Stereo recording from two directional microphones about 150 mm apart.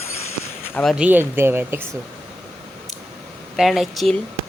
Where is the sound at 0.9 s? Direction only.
10° right (ahead or behind).